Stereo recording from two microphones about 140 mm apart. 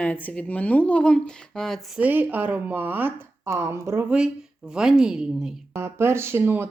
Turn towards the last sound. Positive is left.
turn(degrees=-15)  # may be behind; listen again after turning